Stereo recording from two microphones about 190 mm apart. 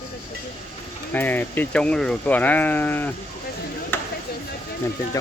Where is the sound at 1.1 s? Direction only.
10° left (ahead or behind).